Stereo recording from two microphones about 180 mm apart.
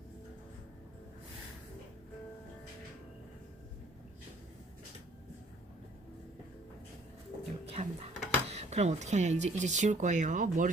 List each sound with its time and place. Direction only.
7.7 s speech: 35° right (ahead or behind)